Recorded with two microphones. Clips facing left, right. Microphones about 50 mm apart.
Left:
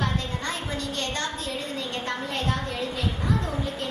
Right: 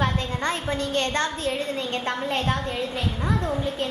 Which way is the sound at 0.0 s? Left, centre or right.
Right.